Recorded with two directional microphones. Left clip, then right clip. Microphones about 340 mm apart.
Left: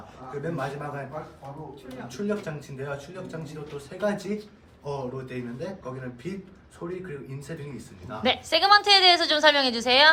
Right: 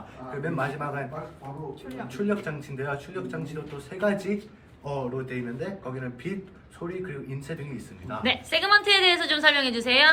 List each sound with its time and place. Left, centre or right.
0.4 s a woman's voice: centre
2.1 s a woman's voice: centre